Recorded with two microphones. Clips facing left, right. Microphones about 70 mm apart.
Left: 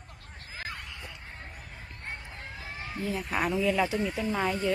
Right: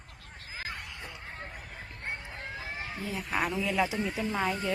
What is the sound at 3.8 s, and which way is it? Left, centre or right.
Speech, centre.